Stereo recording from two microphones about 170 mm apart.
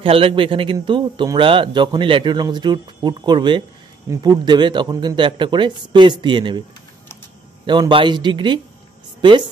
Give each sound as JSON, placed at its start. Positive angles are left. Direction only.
{"t": 0.0, "sound": "speech", "side_deg": -35}
{"t": 7.6, "sound": "speech", "side_deg": -25}